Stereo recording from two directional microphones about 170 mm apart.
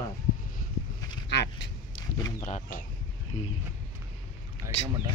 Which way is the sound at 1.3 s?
90° left.